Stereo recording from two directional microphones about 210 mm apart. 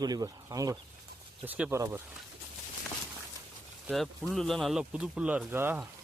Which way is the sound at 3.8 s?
Centre (ahead or behind).